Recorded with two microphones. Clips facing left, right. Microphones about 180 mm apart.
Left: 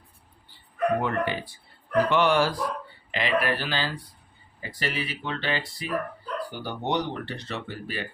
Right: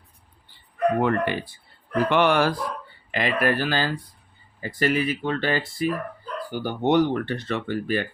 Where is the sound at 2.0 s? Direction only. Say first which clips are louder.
Right 4 dB; 60° right (ahead or behind).